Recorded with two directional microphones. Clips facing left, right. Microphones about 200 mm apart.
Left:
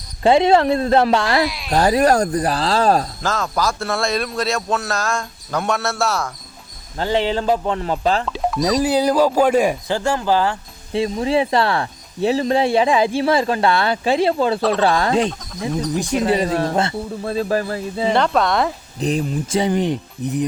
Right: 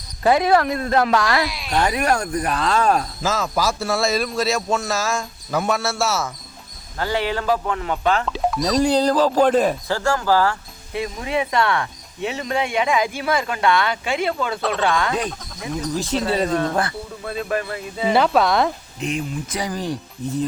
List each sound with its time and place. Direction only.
0.2 s speech: 25° left (ahead or behind)
1.5 s speech: centre (ahead or behind)
1.7 s speech: 35° left (ahead or behind)
3.2 s a man's voice: 5° right (ahead or behind)
7.0 s speech: 25° left (ahead or behind)
8.3 s speech: centre (ahead or behind); by 15.3 s 30° left (ahead or behind)
16.0 s speech: 15° left (ahead or behind)
16.5 s speech: 30° left (ahead or behind)
18.1 s a man's voice: 5° right (ahead or behind)
18.9 s speech: 35° left (ahead or behind); by 20.4 s 20° left (ahead or behind)